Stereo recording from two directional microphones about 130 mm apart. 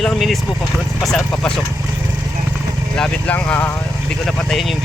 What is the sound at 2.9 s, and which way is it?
Speech, 5° left (ahead or behind).